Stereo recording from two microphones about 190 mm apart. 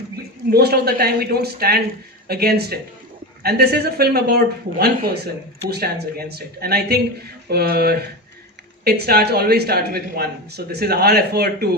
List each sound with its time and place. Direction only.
0.5 s speech: 55° right (ahead or behind)